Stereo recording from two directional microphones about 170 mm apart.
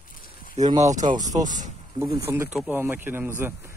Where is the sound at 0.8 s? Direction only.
45° right (ahead or behind).